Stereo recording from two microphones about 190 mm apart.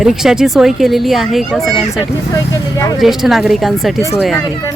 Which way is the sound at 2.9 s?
Centre (ahead or behind).